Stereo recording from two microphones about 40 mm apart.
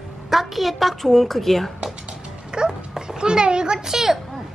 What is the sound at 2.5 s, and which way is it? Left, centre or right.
Dog, centre.